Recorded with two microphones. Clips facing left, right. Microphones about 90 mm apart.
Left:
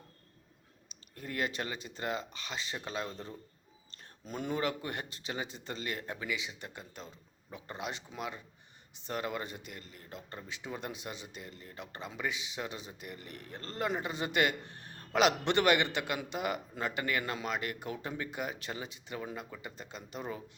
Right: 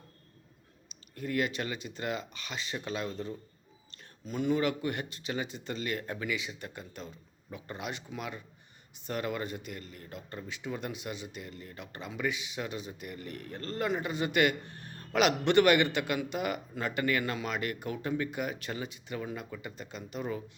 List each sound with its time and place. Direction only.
1.1 s speech: 30° left (ahead or behind)